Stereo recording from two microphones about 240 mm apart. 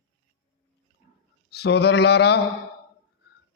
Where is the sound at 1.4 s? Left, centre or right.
Left.